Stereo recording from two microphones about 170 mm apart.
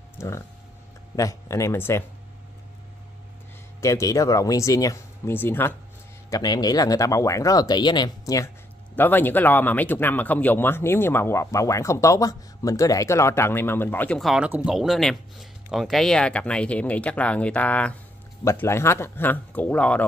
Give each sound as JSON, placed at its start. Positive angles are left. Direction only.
{"t": 1.1, "sound": "speech", "side_deg": 20}
{"t": 3.8, "sound": "speech", "side_deg": 20}
{"t": 6.3, "sound": "speech", "side_deg": 25}
{"t": 8.9, "sound": "speech", "side_deg": 10}